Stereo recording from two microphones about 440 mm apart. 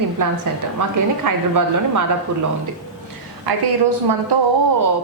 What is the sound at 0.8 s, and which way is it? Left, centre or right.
A woman's voice, right.